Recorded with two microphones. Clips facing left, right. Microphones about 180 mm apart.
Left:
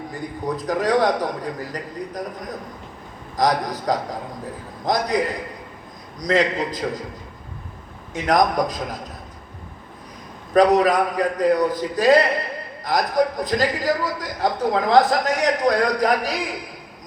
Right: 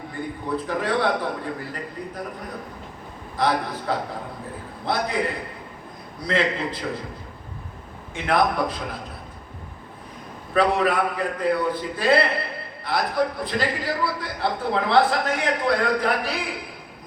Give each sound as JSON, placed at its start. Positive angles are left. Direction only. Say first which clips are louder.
{"t": 0.1, "sound": "a man's voice", "louder": "even", "side_deg": 40}
{"t": 8.1, "sound": "a man's voice", "louder": "left 3 dB", "side_deg": 40}
{"t": 10.5, "sound": "a man's voice", "louder": "left 5 dB", "side_deg": 40}